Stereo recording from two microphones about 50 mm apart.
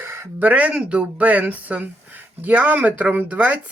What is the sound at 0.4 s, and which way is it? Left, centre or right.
Speech, right.